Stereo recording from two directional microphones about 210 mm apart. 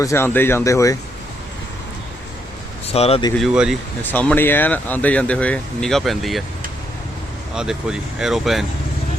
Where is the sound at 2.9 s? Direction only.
30° left (ahead or behind).